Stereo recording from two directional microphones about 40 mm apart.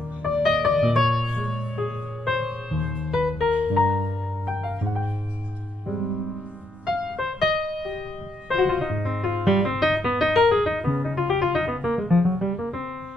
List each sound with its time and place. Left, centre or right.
0.4 s music: centre
1.2 s music: right
1.5 s music: centre
4.5 s music: right
6.9 s music: centre
9.2 s music: centre